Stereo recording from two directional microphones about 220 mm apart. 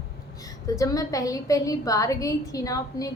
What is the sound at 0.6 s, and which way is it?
A woman's voice, 15° left (ahead or behind).